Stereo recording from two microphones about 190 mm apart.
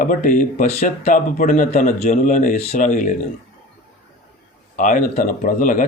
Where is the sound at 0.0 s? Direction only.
45° left (ahead or behind).